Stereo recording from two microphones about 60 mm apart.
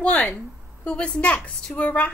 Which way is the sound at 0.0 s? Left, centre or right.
Left.